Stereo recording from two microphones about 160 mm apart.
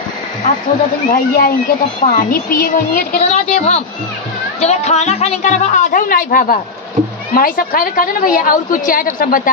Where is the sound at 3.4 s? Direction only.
40° left (ahead or behind).